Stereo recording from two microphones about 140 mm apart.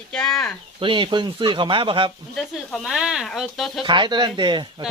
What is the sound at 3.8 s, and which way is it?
Speech, 35° right (ahead or behind).